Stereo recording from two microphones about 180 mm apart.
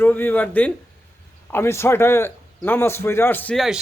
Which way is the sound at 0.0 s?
10° left (ahead or behind).